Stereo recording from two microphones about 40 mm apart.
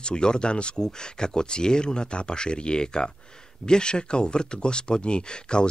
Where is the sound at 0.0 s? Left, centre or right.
Left.